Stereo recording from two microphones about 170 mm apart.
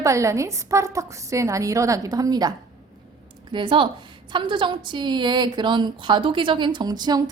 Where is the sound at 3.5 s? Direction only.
30° right (ahead or behind).